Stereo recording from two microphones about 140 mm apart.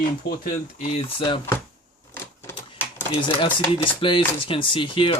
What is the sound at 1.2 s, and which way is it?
Speech, 40° left (ahead or behind).